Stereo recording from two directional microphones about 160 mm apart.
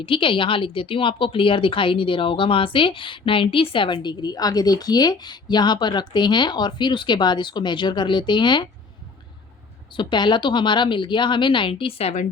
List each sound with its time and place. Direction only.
0.0 s a woman's voice: 30° left (ahead or behind)
9.9 s a woman's voice: 30° left (ahead or behind)